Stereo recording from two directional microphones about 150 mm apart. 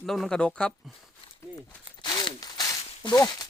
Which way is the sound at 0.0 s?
Centre (ahead or behind).